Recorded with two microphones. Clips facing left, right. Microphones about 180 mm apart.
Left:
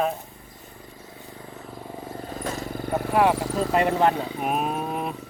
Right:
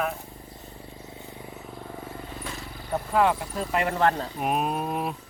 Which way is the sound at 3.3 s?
90° left.